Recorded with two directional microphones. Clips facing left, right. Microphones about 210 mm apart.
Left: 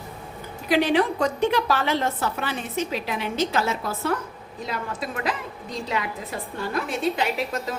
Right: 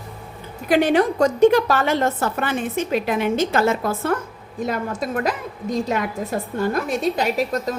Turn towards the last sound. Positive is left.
turn(degrees=-40)  # may be behind; listen again after turning